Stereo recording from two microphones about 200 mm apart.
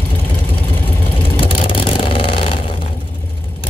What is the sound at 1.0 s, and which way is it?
Vehicle, 25° left (ahead or behind).